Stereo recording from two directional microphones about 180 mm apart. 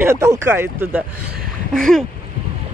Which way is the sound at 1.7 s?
Centre (ahead or behind).